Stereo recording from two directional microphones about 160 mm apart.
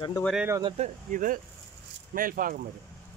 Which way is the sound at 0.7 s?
50° right (ahead or behind).